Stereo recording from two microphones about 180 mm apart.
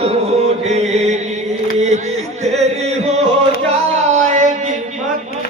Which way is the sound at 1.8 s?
40° right (ahead or behind).